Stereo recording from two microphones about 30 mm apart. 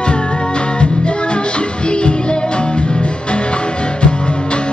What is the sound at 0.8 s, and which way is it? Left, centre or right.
Music, left.